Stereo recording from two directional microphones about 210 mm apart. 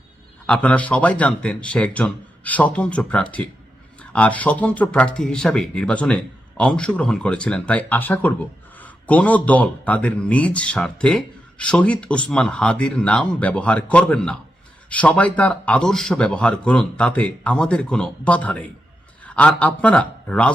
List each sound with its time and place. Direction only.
0.4 s a man's voice: 5° left (ahead or behind)